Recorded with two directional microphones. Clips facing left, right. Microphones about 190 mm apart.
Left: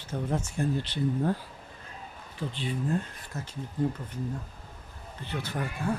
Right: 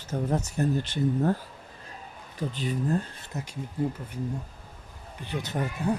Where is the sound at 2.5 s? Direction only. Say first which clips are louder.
Right 2 dB; 40° right (ahead or behind).